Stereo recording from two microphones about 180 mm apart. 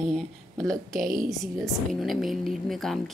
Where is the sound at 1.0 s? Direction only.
50° right (ahead or behind).